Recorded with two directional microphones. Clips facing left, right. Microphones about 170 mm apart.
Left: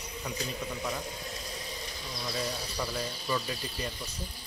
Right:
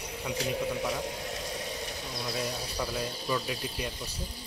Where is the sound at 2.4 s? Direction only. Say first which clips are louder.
Even; 5° right (ahead or behind).